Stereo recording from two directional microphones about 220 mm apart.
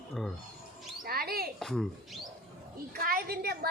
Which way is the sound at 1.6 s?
Centre (ahead or behind).